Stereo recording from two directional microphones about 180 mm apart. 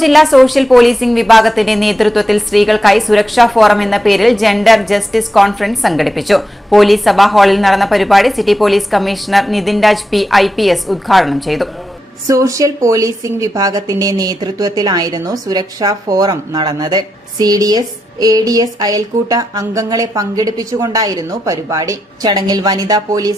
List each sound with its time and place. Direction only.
0.0 s a woman's voice: centre (ahead or behind)
12.3 s speech: 20° right (ahead or behind)